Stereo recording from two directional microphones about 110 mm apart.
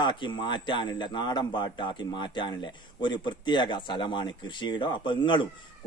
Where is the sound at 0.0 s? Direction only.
45° left (ahead or behind).